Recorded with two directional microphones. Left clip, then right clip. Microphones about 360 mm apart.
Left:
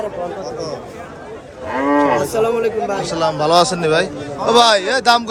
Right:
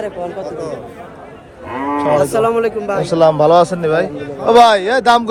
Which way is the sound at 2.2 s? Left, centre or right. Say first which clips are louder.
Right 3 dB; right.